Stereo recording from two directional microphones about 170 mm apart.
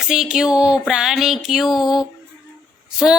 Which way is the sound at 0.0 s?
5° right (ahead or behind).